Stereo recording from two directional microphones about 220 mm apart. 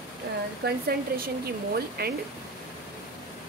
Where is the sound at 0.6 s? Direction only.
45° right (ahead or behind).